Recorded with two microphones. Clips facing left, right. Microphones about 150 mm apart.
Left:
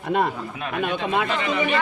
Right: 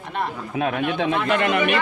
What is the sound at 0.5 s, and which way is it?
Speech, 65° right (ahead or behind).